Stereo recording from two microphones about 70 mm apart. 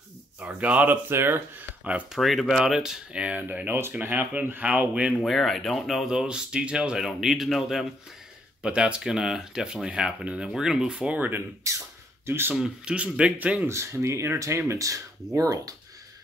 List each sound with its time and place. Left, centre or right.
0.4 s speech: right
1.0 s speech: right
2.1 s speech: centre
5.2 s speech: centre
6.0 s speech: centre
8.6 s speech: centre
11.0 s speech: right
11.7 s beatboxing: right
12.3 s speech: right
12.5 s speech: centre
13.7 s speech: right
14.7 s speech: right